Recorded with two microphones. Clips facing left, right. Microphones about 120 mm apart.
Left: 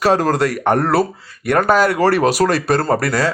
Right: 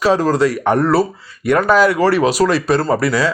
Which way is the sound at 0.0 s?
55° left (ahead or behind).